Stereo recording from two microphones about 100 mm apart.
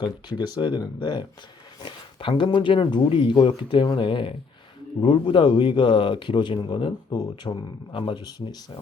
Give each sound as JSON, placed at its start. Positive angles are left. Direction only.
{"t": 0.0, "sound": "speech", "side_deg": 45}
{"t": 7.5, "sound": "a man's voice", "side_deg": 60}
{"t": 8.2, "sound": "speech", "side_deg": 40}